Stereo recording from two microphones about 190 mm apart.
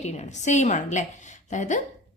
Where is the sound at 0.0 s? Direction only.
35° left (ahead or behind).